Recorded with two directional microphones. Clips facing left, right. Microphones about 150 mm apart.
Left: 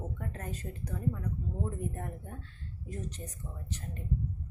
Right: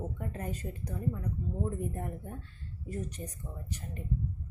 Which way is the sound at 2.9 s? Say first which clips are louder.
Right 3 dB; 10° right (ahead or behind).